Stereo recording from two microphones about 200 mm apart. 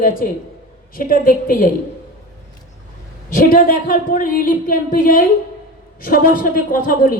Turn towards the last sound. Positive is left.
turn(degrees=45)  # may be behind; listen again after turning